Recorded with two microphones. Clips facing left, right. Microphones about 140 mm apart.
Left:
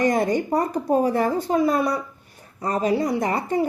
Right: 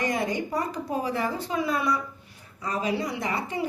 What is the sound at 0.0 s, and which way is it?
A woman's voice, 45° left (ahead or behind).